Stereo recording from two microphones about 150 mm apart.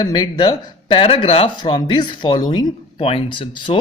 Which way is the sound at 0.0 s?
30° left (ahead or behind).